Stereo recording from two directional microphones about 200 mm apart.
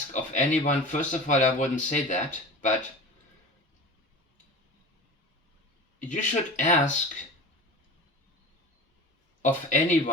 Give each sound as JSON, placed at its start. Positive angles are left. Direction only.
{"t": 0.1, "sound": "speech", "side_deg": 40}
{"t": 6.0, "sound": "speech", "side_deg": 40}
{"t": 9.4, "sound": "speech", "side_deg": 40}